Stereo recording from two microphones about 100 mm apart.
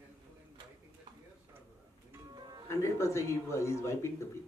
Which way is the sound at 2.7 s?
30° left (ahead or behind).